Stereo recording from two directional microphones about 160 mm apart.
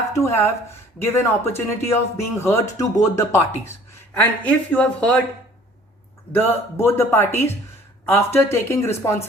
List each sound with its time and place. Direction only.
0.1 s a man's voice: 15° left (ahead or behind)
6.3 s a man's voice: 15° left (ahead or behind)